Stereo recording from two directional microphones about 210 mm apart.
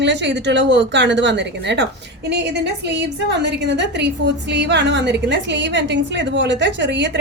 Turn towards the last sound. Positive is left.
turn(degrees=-55)  # may be behind; listen again after turning